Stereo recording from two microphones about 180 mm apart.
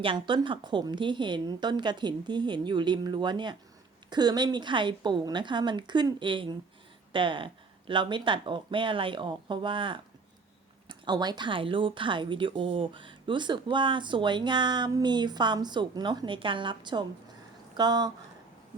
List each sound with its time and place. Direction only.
0.0 s speech: 30° right (ahead or behind)